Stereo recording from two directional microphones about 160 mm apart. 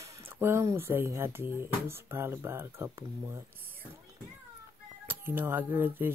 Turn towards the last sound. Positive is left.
turn(degrees=-10)  # may be behind; listen again after turning